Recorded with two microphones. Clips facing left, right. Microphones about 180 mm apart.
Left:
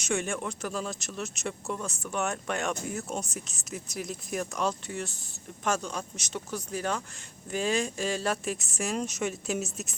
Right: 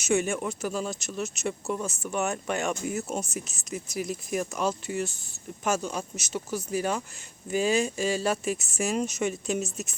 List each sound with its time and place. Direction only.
0.0 s speech: 5° right (ahead or behind)